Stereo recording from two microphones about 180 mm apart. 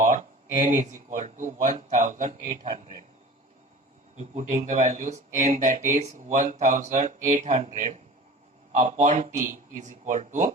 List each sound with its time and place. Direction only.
0.0 s speech: 45° right (ahead or behind)
4.2 s speech: 40° right (ahead or behind)